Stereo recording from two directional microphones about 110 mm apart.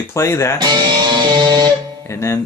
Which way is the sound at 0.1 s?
25° left (ahead or behind).